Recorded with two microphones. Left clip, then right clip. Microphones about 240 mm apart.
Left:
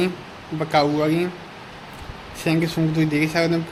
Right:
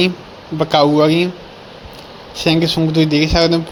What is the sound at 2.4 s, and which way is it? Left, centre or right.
A man's voice, centre.